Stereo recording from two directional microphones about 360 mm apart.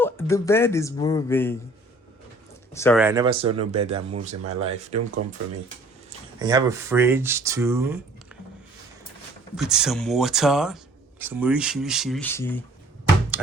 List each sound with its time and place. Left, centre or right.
0.0 s speech: centre
2.7 s speech: centre
3.0 s speech: centre
9.6 s speech: centre